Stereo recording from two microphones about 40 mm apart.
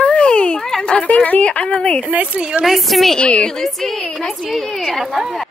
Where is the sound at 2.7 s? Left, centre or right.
Centre.